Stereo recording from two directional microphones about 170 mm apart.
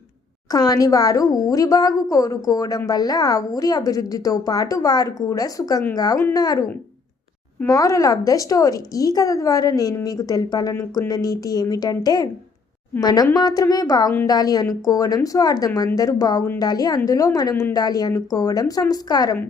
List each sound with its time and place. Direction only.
0.5 s a woman's voice: 25° left (ahead or behind)
7.7 s a woman's voice: 20° left (ahead or behind)